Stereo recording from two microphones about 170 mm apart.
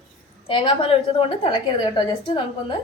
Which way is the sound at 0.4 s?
30° left (ahead or behind).